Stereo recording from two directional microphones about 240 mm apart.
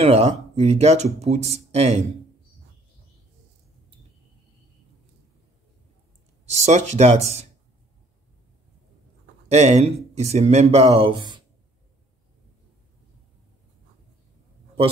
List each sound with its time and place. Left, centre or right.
0.0 s speech: right
6.5 s speech: right
9.5 s speech: right